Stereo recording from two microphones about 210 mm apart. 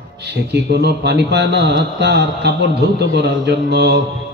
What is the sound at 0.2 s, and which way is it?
A man's voice, 55° right (ahead or behind).